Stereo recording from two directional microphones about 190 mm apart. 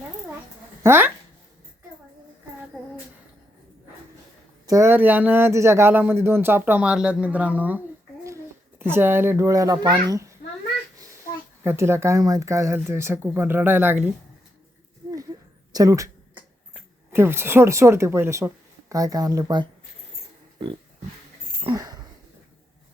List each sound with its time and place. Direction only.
0.8 s speech: 10° right (ahead or behind)
4.6 s speech: 15° right (ahead or behind)
8.8 s speech: 10° right (ahead or behind)
11.6 s speech: 15° right (ahead or behind)
15.7 s a sound: 20° right (ahead or behind)
16.7 s speech: 10° right (ahead or behind)
21.6 s a sound: 20° right (ahead or behind)